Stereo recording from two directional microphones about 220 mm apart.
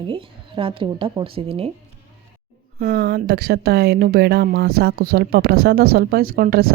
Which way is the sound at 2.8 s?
45° right (ahead or behind).